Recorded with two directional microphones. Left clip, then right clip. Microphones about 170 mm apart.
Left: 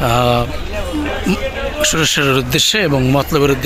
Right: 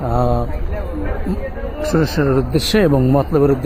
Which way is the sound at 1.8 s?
10° left (ahead or behind).